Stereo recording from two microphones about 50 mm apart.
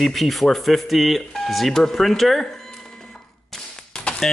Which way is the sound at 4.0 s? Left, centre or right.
Centre.